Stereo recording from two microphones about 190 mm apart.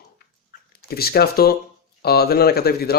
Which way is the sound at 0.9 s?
55° left (ahead or behind).